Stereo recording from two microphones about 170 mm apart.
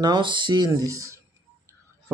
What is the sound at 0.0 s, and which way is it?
Speech, 25° right (ahead or behind).